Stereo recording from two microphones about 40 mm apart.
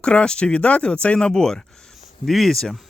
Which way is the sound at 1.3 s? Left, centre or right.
Centre.